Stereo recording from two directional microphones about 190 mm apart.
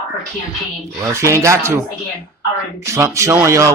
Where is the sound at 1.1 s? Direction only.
15° right (ahead or behind).